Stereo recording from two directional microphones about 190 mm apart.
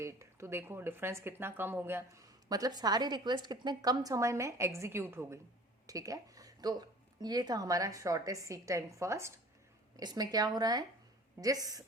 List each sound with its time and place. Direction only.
0.0 s speech: 15° right (ahead or behind)